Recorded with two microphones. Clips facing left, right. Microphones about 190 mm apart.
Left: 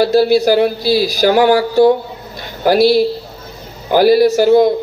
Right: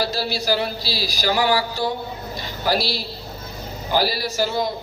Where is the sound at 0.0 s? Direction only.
55° left (ahead or behind).